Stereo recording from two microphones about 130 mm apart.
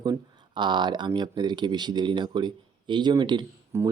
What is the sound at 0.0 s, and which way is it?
Speech, 35° right (ahead or behind).